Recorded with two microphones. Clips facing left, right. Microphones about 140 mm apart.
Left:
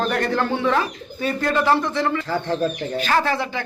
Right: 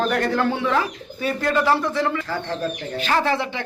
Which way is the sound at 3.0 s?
25° right (ahead or behind).